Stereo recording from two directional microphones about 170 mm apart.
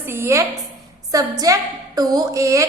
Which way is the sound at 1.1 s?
20° right (ahead or behind).